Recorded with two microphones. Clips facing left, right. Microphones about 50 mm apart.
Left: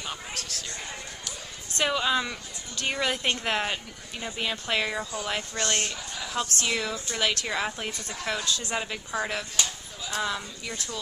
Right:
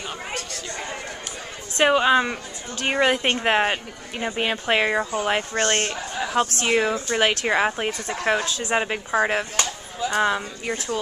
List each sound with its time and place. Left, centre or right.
1.8 s speech: right